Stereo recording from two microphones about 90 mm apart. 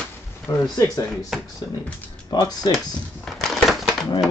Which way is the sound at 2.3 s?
50° left (ahead or behind).